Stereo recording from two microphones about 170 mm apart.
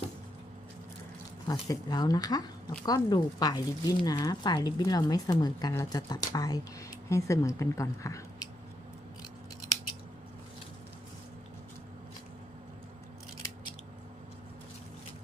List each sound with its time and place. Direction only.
1.5 s speech: 20° left (ahead or behind)